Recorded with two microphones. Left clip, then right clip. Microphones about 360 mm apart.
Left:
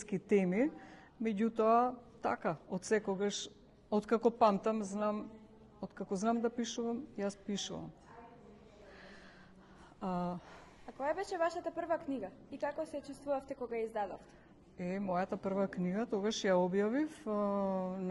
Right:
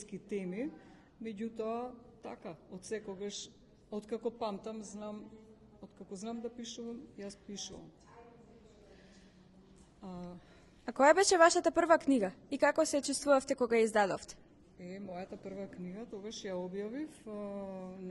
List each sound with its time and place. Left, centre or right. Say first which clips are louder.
0.1 s speech: left 9 dB; left
10.0 s speech: left 11 dB; left
10.8 s a woman's voice: right 12 dB; right
15.1 s speech: left 10 dB; left